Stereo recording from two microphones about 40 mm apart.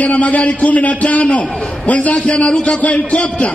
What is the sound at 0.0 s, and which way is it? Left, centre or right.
A man's voice, left.